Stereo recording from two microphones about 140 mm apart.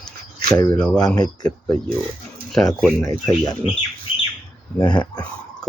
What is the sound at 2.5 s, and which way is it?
Speech, centre (ahead or behind).